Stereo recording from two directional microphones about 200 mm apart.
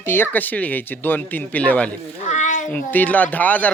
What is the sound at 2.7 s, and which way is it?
Speech, 10° left (ahead or behind).